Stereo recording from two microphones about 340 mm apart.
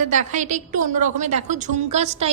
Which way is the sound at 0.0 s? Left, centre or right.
Right.